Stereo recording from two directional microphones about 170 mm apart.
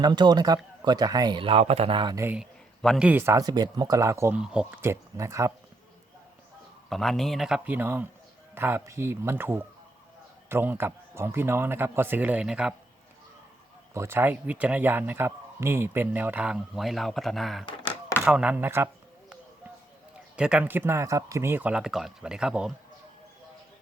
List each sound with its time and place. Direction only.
0.0 s a man's voice: 25° right (ahead or behind)
2.2 s a man's voice: 5° right (ahead or behind)
3.1 s a man's voice: 15° right (ahead or behind)
6.9 s speech: centre (ahead or behind)
13.9 s speech: 15° right (ahead or behind)
20.3 s speech: 5° right (ahead or behind)